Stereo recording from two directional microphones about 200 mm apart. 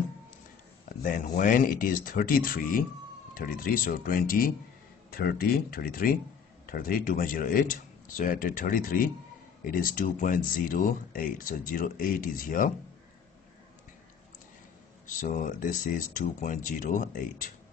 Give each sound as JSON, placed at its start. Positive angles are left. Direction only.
{"t": 0.8, "sound": "speech", "side_deg": 45}
{"t": 15.0, "sound": "speech", "side_deg": 40}